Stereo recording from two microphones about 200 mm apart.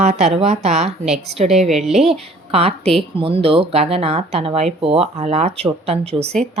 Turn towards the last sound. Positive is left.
turn(degrees=-30)  # may be behind; listen again after turning